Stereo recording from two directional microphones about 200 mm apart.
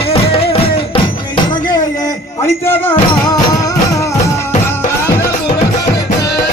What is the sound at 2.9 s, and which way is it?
Music, 20° left (ahead or behind).